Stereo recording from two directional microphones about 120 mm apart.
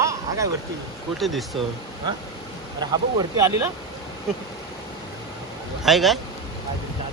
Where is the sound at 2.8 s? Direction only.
35° right (ahead or behind).